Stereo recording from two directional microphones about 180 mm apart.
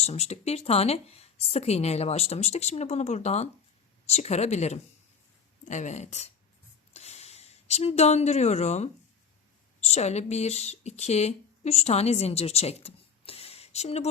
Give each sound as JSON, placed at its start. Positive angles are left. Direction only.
{"t": 0.0, "sound": "speech", "side_deg": 35}
{"t": 6.9, "sound": "a sound", "side_deg": 35}
{"t": 9.8, "sound": "speech", "side_deg": 35}